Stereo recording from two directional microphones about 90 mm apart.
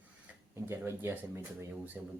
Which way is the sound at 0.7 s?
25° right (ahead or behind).